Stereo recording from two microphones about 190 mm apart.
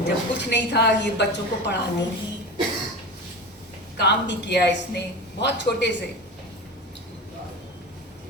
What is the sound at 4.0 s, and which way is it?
Speech, 65° left (ahead or behind).